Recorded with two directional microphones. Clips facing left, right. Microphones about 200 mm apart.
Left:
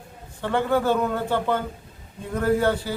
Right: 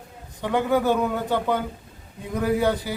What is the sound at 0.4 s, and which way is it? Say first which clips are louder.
Speech: right 1 dB; 15° right (ahead or behind).